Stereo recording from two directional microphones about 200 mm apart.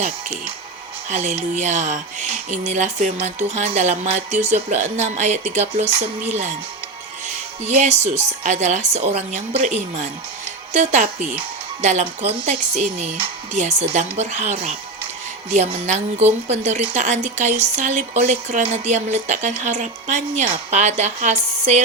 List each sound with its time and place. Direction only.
1.1 s speech: 35° right (ahead or behind)
7.6 s speech: 35° right (ahead or behind)